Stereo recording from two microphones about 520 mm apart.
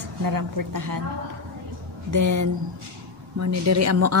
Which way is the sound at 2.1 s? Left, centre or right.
Right.